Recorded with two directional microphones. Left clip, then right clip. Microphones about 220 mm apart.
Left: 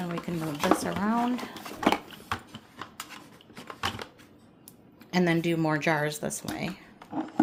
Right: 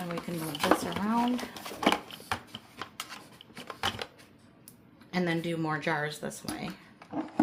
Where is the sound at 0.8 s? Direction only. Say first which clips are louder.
Left 3 dB; 30° left (ahead or behind).